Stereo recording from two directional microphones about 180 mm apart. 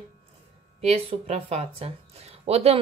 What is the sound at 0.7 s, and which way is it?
Speech, 35° right (ahead or behind).